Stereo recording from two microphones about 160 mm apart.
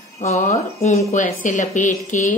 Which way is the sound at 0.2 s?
45° left (ahead or behind).